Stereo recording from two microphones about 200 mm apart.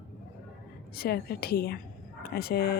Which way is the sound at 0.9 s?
50° left (ahead or behind).